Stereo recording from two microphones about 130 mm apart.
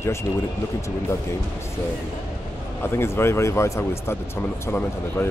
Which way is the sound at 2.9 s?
20° left (ahead or behind).